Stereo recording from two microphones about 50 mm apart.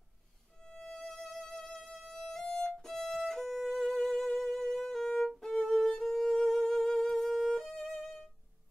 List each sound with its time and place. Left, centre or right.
0.6 s music: centre
0.9 s music: centre